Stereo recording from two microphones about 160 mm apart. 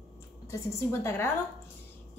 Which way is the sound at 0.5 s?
15° left (ahead or behind).